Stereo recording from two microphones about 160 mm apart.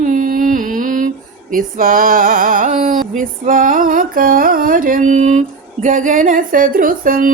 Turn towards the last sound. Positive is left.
turn(degrees=-60)  # may be behind; listen again after turning